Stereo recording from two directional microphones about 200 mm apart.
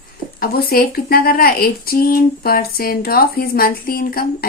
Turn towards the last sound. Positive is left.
turn(degrees=45)  # may be behind; listen again after turning